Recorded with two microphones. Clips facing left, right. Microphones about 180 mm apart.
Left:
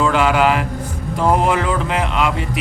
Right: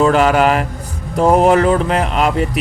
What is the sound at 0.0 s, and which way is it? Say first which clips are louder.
Speech: right 3 dB; 40° right (ahead or behind).